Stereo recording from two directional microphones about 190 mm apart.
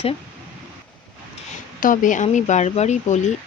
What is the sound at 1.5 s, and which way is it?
Speech, 45° left (ahead or behind).